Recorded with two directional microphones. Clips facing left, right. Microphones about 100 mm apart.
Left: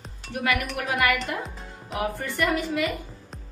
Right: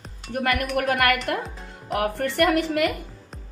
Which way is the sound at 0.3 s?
45° right (ahead or behind).